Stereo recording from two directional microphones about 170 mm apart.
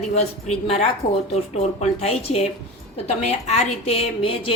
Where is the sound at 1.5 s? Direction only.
40° left (ahead or behind).